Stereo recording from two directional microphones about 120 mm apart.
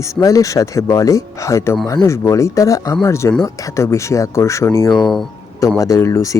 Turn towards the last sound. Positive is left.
turn(degrees=25)  # may be behind; listen again after turning